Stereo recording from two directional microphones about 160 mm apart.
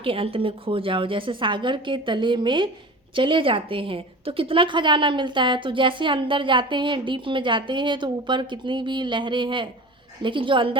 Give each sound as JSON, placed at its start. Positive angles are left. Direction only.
{"t": 0.0, "sound": "a woman's voice", "side_deg": -35}